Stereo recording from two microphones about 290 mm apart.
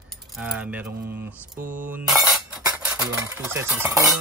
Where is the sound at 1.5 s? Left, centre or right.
Right.